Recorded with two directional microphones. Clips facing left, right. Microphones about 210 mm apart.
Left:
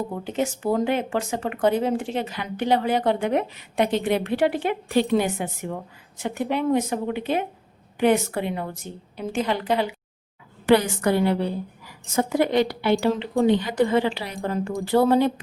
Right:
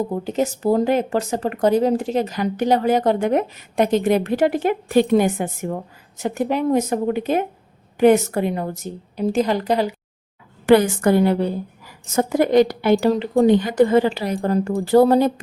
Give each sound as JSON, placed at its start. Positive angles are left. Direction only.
{"t": 0.1, "sound": "a woman's voice", "side_deg": -40}